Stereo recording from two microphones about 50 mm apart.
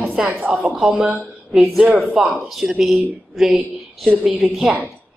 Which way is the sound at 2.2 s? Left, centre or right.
Centre.